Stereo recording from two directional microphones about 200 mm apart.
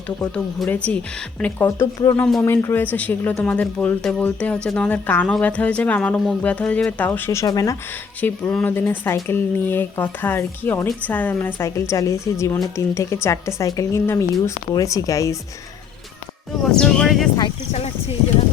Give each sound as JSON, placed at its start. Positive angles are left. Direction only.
{"t": 0.3, "sound": "speech", "side_deg": 5}
{"t": 16.7, "sound": "speech", "side_deg": 5}
{"t": 17.7, "sound": "speech", "side_deg": 30}